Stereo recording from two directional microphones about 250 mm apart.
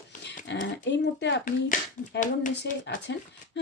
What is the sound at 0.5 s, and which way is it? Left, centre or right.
Speech, left.